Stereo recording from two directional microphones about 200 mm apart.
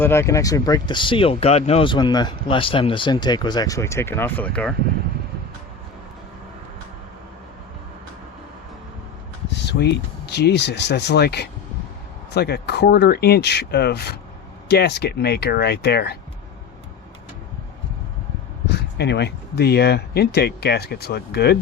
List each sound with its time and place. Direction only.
0.0 s speech: 10° left (ahead or behind)
9.5 s speech: 60° left (ahead or behind)
18.7 s speech: 55° left (ahead or behind)